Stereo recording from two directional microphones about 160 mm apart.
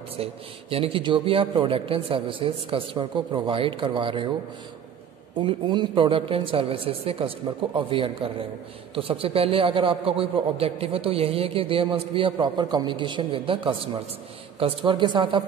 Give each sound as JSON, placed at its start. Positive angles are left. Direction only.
{"t": 0.2, "sound": "a man's voice", "side_deg": -35}
{"t": 5.4, "sound": "a man's voice", "side_deg": -30}